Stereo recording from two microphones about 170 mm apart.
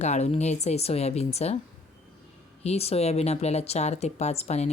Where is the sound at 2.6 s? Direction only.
35° left (ahead or behind).